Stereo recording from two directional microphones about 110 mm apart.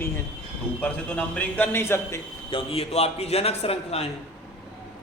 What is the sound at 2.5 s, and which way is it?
A man's voice, 65° left (ahead or behind).